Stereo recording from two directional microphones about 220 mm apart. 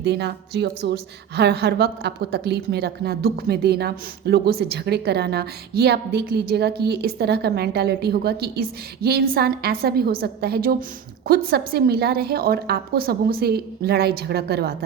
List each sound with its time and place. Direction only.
0.0 s a woman's voice: 50° right (ahead or behind)